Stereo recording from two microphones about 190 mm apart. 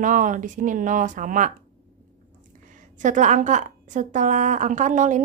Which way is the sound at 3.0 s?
40° right (ahead or behind).